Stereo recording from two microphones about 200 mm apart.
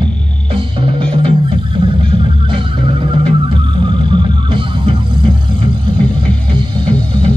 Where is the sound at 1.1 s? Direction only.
25° right (ahead or behind).